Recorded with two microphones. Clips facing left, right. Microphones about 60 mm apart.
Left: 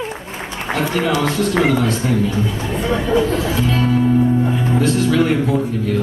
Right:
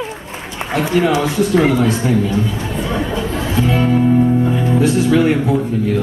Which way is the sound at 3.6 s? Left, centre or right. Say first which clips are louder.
Right 4 dB; centre.